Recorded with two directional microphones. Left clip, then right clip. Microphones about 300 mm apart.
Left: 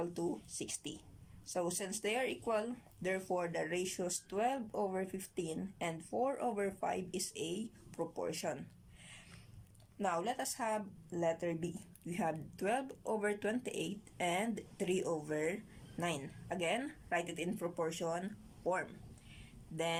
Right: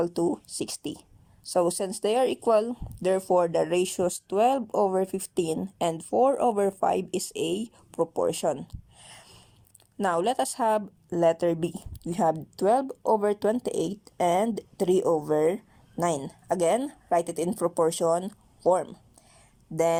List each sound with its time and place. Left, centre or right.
0.0 s speech: right
10.0 s speech: right
19.7 s speech: centre